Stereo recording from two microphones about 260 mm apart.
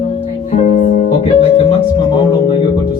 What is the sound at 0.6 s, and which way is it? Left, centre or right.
Music, left.